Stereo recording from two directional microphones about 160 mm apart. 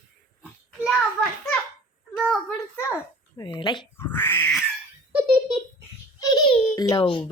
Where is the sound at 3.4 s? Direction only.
30° left (ahead or behind).